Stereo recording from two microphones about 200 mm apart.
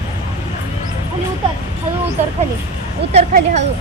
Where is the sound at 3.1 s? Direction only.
35° right (ahead or behind).